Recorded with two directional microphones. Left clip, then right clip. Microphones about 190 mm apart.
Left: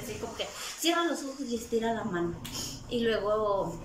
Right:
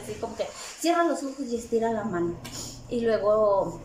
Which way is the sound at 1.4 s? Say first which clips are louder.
Right 4 dB; centre (ahead or behind).